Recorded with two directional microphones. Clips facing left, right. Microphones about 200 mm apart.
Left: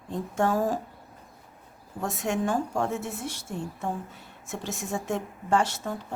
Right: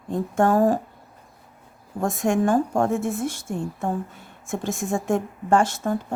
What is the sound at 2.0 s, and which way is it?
Speech, 50° right (ahead or behind).